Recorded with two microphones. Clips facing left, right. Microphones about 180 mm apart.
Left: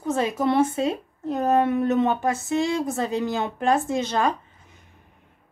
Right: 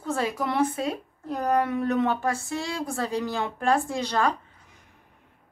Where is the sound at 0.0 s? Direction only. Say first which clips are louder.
Left 4 dB; 20° left (ahead or behind).